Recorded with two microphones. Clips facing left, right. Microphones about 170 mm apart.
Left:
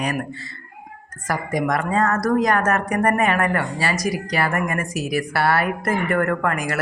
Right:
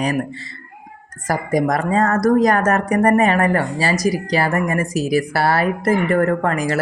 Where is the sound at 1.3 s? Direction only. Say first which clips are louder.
Right 4 dB; 35° right (ahead or behind).